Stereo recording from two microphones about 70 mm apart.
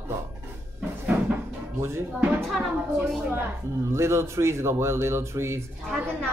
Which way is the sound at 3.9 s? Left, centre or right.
Right.